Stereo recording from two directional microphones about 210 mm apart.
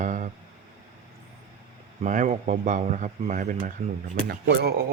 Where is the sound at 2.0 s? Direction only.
35° right (ahead or behind).